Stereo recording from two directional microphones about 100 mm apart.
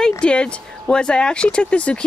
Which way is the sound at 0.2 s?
10° left (ahead or behind).